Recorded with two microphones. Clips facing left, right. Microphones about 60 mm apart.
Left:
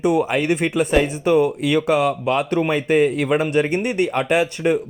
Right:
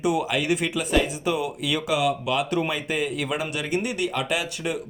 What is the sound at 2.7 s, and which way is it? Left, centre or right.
A man's voice, left.